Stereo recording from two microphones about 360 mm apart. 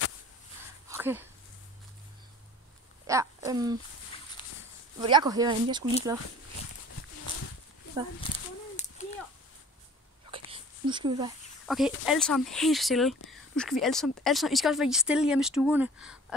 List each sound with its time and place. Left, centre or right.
0.8 s a sound: centre
3.1 s speech: centre
5.0 s speech: centre
8.3 s speech: centre
8.7 s a sound: centre
10.3 s whispering: centre
11.6 s speech: centre